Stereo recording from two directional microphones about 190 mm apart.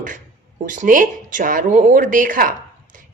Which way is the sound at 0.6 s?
45° right (ahead or behind).